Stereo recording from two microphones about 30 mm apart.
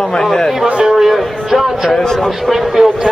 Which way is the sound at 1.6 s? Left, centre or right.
Centre.